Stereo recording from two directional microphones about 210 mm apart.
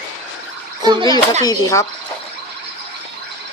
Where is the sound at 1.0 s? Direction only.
20° left (ahead or behind).